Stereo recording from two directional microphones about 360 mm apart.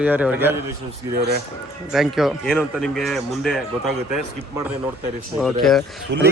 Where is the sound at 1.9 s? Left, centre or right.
Centre.